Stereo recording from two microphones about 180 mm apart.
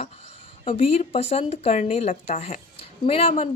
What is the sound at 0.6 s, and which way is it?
A woman's voice, 30° left (ahead or behind).